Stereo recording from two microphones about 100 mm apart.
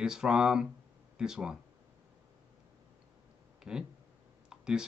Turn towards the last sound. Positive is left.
turn(degrees=-5)  # may be behind; listen again after turning